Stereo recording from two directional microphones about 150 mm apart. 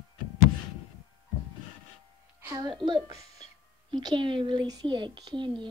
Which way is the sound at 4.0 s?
30° right (ahead or behind).